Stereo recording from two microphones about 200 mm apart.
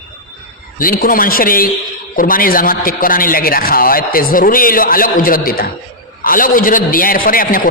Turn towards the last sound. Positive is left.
turn(degrees=45)  # may be behind; listen again after turning